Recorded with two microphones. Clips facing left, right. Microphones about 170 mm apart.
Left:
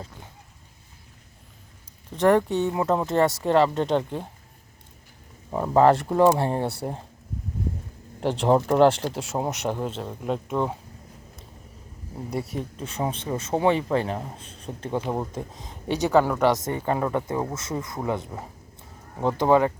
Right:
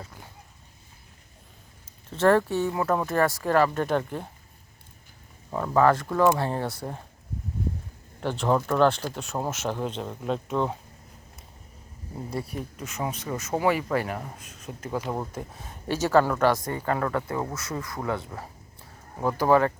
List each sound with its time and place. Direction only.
2.0 s speech: 15° left (ahead or behind)
5.5 s speech: 20° left (ahead or behind)
8.2 s speech: 25° left (ahead or behind)
9.6 s speech: 10° left (ahead or behind)
12.3 s speech: 25° left (ahead or behind)
15.0 s speech: 10° left (ahead or behind)